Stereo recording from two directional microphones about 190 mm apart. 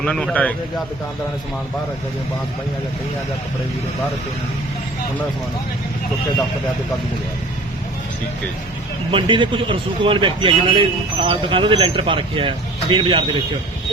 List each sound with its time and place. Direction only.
0.0 s speech: 5° left (ahead or behind)
9.1 s a man's voice: 25° right (ahead or behind)